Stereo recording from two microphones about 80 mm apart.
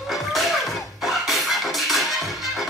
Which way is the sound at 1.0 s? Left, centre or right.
Centre.